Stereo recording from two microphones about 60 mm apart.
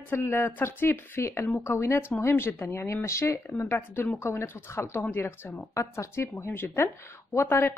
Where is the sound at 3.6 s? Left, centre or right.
Left.